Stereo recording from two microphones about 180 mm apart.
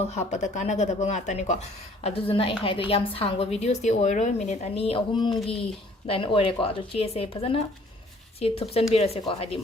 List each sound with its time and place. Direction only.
0.0 s a woman's voice: 40° left (ahead or behind)